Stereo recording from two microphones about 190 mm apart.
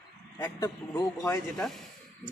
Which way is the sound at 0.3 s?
15° left (ahead or behind).